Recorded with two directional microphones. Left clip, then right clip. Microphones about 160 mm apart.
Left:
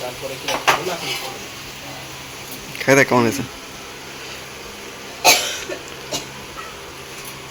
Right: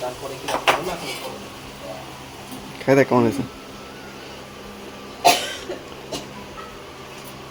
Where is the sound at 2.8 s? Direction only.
5° right (ahead or behind).